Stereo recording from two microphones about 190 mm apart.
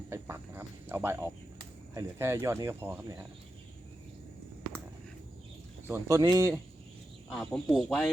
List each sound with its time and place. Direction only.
0.1 s a sound: 15° right (ahead or behind)
1.9 s speech: 15° right (ahead or behind)
5.9 s speech: 15° right (ahead or behind)
7.3 s speech: 5° left (ahead or behind)